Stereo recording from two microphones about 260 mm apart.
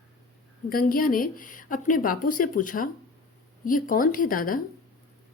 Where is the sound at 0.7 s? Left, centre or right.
Left.